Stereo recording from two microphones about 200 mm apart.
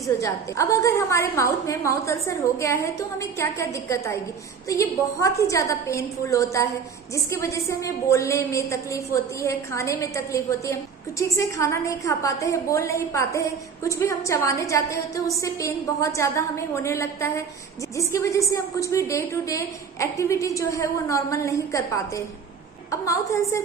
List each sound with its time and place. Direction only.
0.2 s a woman's voice: 15° left (ahead or behind)